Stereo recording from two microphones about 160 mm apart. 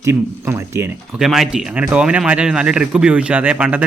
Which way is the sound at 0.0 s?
15° right (ahead or behind).